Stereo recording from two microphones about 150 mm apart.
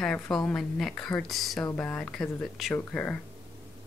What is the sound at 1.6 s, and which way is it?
Speech, 10° left (ahead or behind).